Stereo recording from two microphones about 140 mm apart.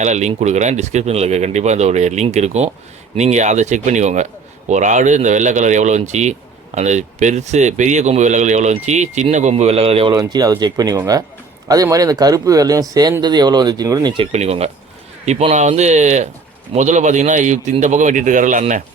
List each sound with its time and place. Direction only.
0.0 s speech: 55° right (ahead or behind)
10.2 s speech: 30° right (ahead or behind)
14.3 s speech: 50° right (ahead or behind); by 18.6 s 65° right (ahead or behind)